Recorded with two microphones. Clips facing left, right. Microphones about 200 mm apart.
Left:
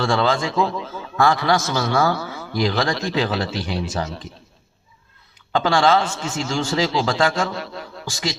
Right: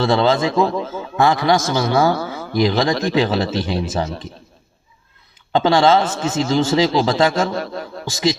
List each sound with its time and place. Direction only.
0.0 s speech: 20° right (ahead or behind)
0.5 s a man's voice: 45° right (ahead or behind)
1.1 s a man's voice: 20° right (ahead or behind)
2.1 s speech: 45° right (ahead or behind)
2.6 s speech: 20° right (ahead or behind)
5.5 s speech: 20° right (ahead or behind)
6.1 s a man's voice: 40° right (ahead or behind)
6.5 s speech: 20° right (ahead or behind)
7.3 s a man's voice: 45° right (ahead or behind)
8.1 s speech: 20° right (ahead or behind)